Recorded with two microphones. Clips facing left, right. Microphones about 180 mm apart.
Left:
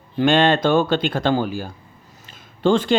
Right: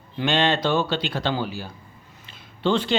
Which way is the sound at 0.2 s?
50° left (ahead or behind).